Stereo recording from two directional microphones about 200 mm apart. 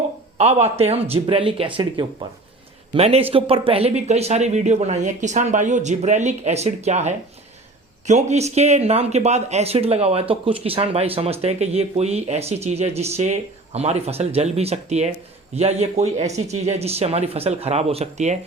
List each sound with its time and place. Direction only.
0.3 s speech: 30° right (ahead or behind)